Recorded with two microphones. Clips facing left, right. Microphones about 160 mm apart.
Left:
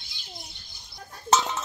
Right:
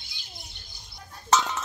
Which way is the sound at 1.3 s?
25° left (ahead or behind).